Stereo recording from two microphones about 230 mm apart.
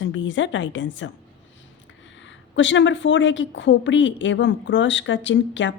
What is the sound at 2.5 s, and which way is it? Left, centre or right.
A woman's voice, left.